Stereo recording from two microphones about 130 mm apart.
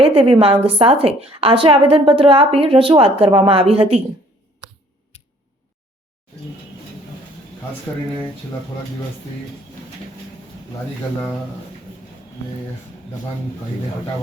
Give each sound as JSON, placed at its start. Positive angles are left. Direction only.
{"t": 0.0, "sound": "a woman's voice", "side_deg": -45}